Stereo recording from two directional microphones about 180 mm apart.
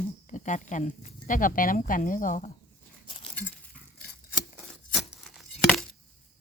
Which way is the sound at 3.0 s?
30° left (ahead or behind).